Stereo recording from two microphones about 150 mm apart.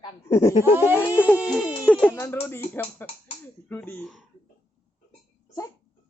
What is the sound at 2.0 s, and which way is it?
A man's voice, 15° left (ahead or behind).